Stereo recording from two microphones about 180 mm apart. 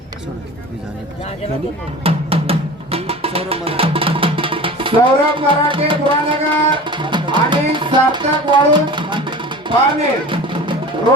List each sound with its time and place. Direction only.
2.0 s music: 35° right (ahead or behind)